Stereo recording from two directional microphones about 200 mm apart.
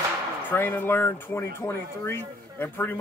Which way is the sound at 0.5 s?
10° left (ahead or behind).